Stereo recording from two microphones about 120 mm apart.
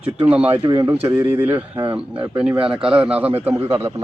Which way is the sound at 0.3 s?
10° right (ahead or behind).